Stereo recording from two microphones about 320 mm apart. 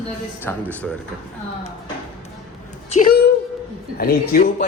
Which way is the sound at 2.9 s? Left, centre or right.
Left.